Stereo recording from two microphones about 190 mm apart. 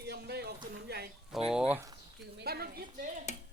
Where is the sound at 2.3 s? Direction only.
55° right (ahead or behind).